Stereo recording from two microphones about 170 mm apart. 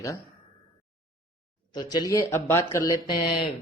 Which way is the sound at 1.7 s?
25° left (ahead or behind).